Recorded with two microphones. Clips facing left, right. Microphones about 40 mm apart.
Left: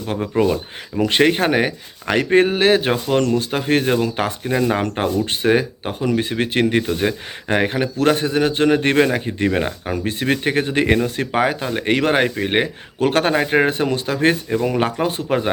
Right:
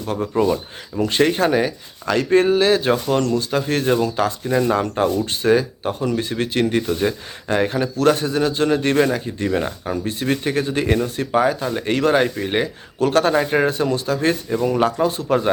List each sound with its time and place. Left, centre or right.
0.1 s speech: left
1.0 s speech: left
10.0 s speech: left